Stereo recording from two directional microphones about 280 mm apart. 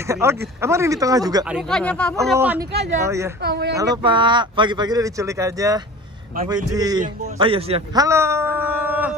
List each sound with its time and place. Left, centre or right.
0.1 s speech: centre
1.7 s speech: centre
2.3 s speech: centre
3.4 s speech: right
3.7 s a man's voice: centre